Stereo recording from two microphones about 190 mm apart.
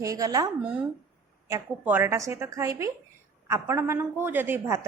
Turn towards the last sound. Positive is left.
turn(degrees=-10)  # may be behind; listen again after turning